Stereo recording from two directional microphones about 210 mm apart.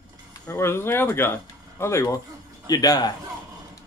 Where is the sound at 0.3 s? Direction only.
10° left (ahead or behind).